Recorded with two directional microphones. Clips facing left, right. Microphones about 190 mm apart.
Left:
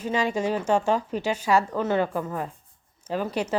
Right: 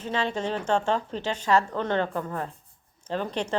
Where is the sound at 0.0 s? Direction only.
10° left (ahead or behind).